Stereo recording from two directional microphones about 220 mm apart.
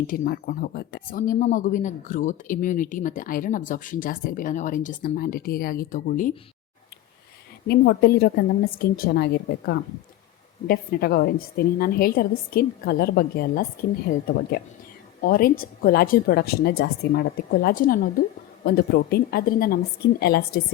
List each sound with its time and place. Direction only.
0.1 s speech: 40° left (ahead or behind)
7.7 s a woman's voice: 45° left (ahead or behind)